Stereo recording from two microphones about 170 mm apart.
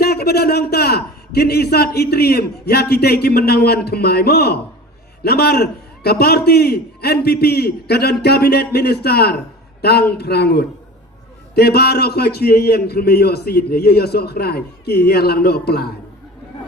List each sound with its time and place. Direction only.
0.0 s a man's voice: 65° left (ahead or behind)